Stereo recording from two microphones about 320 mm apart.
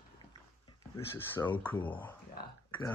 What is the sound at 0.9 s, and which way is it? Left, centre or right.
Speech, centre.